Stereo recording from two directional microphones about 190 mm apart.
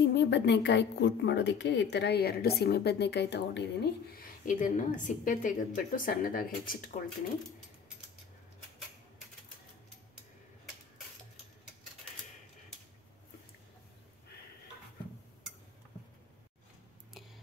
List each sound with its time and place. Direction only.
0.0 s a woman's voice: 65° left (ahead or behind)
4.5 s a woman's voice: 45° left (ahead or behind)